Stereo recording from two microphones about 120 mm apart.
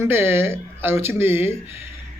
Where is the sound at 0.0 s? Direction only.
20° right (ahead or behind).